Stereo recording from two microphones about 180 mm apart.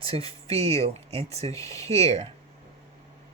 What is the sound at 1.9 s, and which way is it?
Speech, 35° right (ahead or behind).